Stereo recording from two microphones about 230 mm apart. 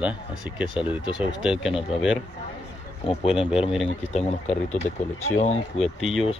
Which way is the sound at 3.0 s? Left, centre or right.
Left.